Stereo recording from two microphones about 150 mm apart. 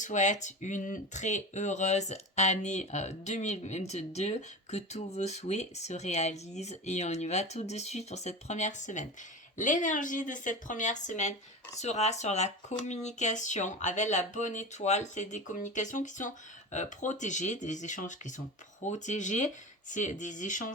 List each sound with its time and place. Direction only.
0.0 s speech: 55° left (ahead or behind)